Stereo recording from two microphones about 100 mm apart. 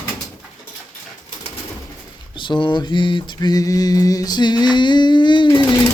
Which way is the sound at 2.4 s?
55° left (ahead or behind).